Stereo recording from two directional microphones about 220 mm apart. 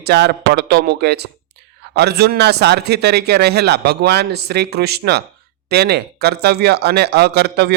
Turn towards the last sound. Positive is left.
turn(degrees=-45)  # may be behind; listen again after turning